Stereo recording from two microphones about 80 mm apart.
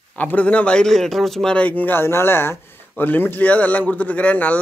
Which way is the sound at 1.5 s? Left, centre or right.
Centre.